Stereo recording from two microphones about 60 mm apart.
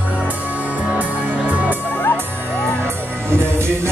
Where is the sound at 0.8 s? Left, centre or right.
Right.